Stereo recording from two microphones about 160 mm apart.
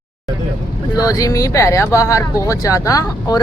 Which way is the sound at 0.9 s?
20° left (ahead or behind).